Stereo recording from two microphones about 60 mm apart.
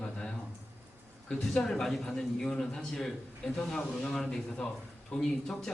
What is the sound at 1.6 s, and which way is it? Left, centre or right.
Speech, centre.